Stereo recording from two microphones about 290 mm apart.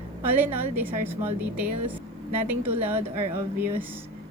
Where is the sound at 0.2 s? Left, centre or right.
Centre.